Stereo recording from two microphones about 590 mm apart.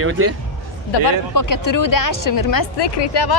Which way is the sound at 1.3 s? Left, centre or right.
Left.